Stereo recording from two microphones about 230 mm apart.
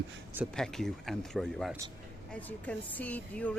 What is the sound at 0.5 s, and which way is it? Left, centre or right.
A woman's voice, centre.